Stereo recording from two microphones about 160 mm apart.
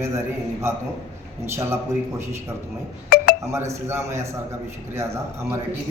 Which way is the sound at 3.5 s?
15° right (ahead or behind).